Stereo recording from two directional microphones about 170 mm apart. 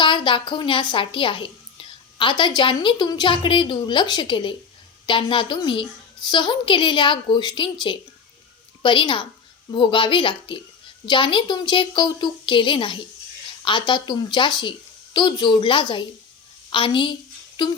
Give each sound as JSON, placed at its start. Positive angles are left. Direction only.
{"t": 0.0, "sound": "a woman's voice", "side_deg": 30}